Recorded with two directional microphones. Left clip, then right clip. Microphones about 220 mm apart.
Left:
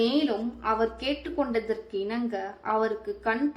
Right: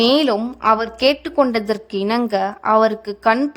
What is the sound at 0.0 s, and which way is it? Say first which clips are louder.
A woman's voice: right 10 dB; 55° right (ahead or behind).